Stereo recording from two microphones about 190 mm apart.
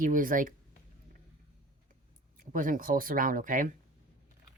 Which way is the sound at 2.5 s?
45° right (ahead or behind).